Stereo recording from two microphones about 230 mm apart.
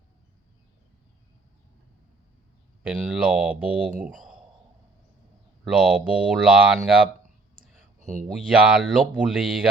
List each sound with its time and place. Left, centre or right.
2.8 s speech: centre
5.6 s speech: centre
7.9 s speech: right
8.3 s speech: centre